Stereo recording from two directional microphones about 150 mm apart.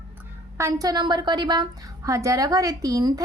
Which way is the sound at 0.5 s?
20° right (ahead or behind).